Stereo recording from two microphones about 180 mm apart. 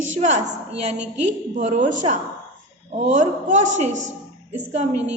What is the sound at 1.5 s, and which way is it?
A woman's voice, 45° right (ahead or behind).